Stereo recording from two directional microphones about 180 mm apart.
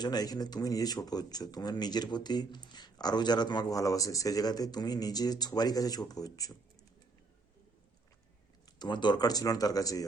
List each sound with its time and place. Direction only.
0.0 s speech: 20° left (ahead or behind)
8.6 s speech: 25° left (ahead or behind)